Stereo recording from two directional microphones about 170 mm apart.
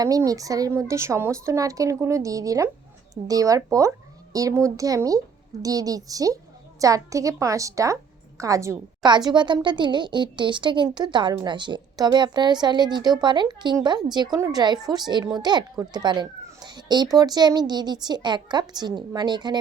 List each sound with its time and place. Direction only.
0.0 s speech: 20° right (ahead or behind)